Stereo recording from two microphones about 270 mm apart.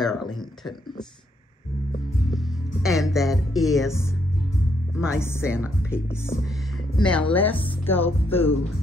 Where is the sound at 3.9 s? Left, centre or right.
Centre.